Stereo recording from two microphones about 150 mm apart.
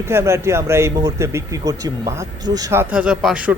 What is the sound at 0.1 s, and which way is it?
Speech, 20° right (ahead or behind).